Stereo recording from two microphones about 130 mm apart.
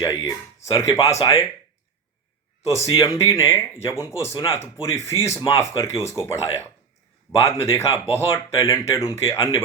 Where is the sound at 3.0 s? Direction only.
25° left (ahead or behind).